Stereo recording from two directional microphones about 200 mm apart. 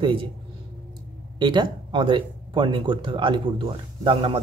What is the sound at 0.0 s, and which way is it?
Speech, 25° right (ahead or behind).